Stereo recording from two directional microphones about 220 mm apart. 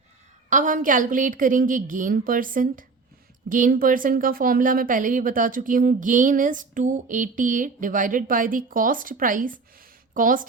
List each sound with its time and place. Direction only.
0.5 s a woman's voice: 35° right (ahead or behind)